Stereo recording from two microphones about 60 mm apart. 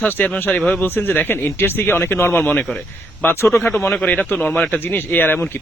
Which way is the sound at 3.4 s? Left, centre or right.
Left.